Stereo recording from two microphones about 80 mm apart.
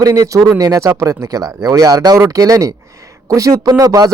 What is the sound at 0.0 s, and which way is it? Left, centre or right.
Speech, right.